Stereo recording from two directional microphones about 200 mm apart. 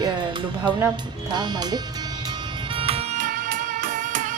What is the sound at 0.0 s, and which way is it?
Music, 20° right (ahead or behind).